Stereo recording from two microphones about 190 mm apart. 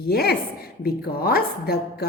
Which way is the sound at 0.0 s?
55° left (ahead or behind).